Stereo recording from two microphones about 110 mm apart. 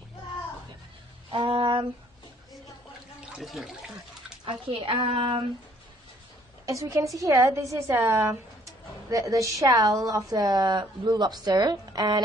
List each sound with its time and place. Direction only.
1.3 s a sound: 50° right (ahead or behind)
3.3 s speech: centre (ahead or behind)
4.5 s speech: 55° right (ahead or behind)
6.6 s a woman's voice: 30° right (ahead or behind)